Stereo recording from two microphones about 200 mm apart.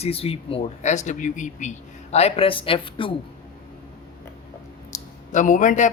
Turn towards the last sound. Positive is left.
turn(degrees=40)  # may be behind; listen again after turning